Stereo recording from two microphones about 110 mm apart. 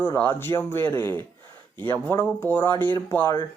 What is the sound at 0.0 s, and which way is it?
Speech, 20° left (ahead or behind).